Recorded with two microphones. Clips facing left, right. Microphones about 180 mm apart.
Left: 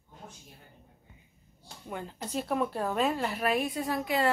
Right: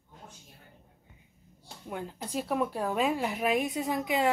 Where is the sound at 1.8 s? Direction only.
5° right (ahead or behind).